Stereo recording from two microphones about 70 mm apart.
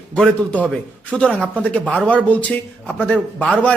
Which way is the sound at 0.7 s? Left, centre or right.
Centre.